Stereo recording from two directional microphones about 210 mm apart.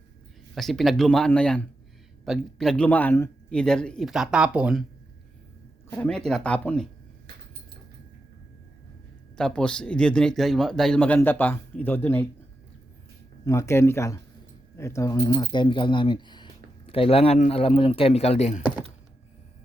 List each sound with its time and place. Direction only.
0.5 s speech: centre (ahead or behind)
6.0 s speech: 5° left (ahead or behind)
9.4 s speech: 5° left (ahead or behind)
13.4 s speech: 15° left (ahead or behind); by 18.6 s 30° left (ahead or behind)